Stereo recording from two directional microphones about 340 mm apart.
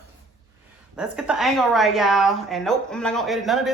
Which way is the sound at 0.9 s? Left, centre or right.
Centre.